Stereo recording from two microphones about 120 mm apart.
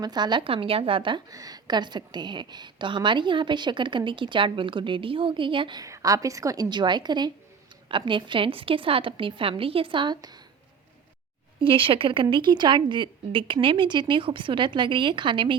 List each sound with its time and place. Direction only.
0.0 s a woman's voice: 35° right (ahead or behind)
1.3 s a woman's voice: 30° right (ahead or behind)
5.8 s a woman's voice: 30° right (ahead or behind)
11.6 s a woman's voice: 45° right (ahead or behind)